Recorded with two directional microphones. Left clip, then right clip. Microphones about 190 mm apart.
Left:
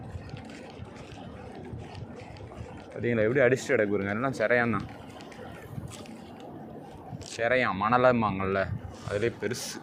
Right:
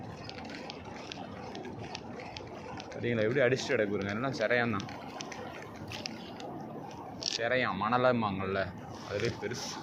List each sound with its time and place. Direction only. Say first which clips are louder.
3.0 s speech: left 5 dB; 65° left (ahead or behind)
7.3 s speech: left 5 dB; 80° left